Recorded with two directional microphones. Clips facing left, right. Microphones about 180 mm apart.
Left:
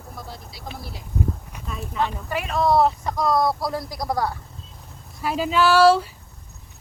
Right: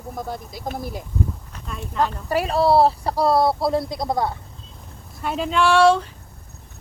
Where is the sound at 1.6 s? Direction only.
Centre (ahead or behind).